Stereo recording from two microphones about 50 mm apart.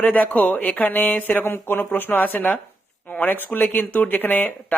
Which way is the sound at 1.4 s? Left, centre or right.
Left.